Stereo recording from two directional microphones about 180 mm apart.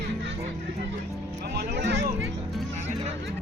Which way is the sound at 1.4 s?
70° right (ahead or behind).